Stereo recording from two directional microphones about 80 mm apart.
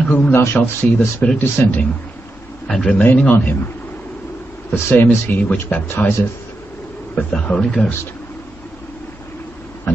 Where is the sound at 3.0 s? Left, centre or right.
Left.